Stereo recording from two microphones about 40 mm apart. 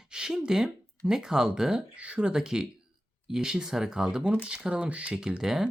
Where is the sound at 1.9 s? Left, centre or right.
Right.